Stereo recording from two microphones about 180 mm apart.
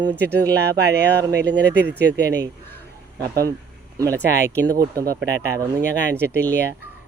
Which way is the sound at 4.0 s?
15° right (ahead or behind).